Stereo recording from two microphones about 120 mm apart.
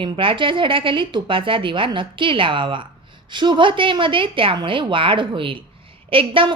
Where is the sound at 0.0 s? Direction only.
45° right (ahead or behind).